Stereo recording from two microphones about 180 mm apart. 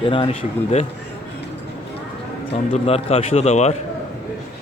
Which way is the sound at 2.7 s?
35° left (ahead or behind).